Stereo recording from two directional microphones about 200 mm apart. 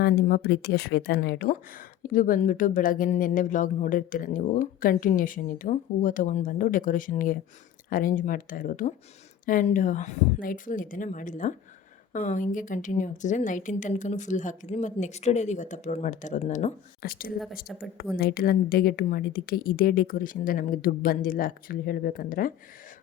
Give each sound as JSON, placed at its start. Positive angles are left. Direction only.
{"t": 0.0, "sound": "a woman's voice", "side_deg": 50}
{"t": 17.0, "sound": "speech", "side_deg": 45}